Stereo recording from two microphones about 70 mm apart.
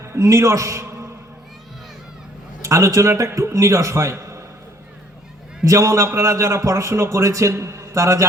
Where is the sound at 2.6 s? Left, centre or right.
Right.